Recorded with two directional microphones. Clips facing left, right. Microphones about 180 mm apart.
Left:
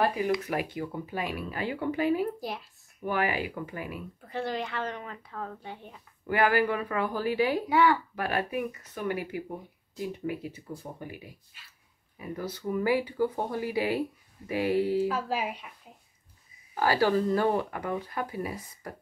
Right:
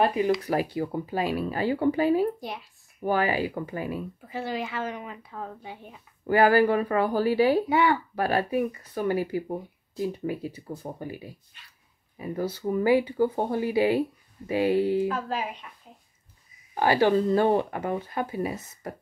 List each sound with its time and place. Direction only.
0.0 s speech: 20° right (ahead or behind)
0.5 s speech: 35° right (ahead or behind)
2.4 s speech: centre (ahead or behind)
3.0 s speech: 30° right (ahead or behind)
4.2 s speech: 5° right (ahead or behind)
6.2 s speech: 35° right (ahead or behind)
7.7 s speech: 20° right (ahead or behind)
8.2 s speech: 30° right (ahead or behind)
11.5 s speech: 5° left (ahead or behind)
12.2 s speech: 30° right (ahead or behind)
15.0 s speech: 5° left (ahead or behind)
16.7 s speech: 20° right (ahead or behind)